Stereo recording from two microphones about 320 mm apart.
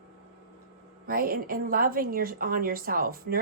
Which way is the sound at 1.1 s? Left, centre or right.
Right.